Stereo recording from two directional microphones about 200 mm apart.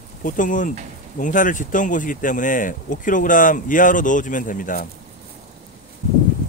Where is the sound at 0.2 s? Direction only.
40° left (ahead or behind).